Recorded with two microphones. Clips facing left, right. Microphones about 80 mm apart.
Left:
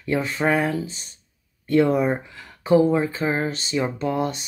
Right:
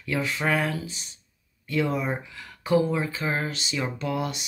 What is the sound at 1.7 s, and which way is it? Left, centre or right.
Speech, left.